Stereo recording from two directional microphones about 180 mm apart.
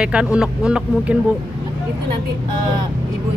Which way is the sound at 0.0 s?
5° right (ahead or behind).